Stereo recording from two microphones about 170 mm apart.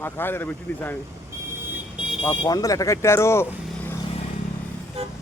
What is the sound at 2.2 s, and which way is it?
Speech, 25° left (ahead or behind).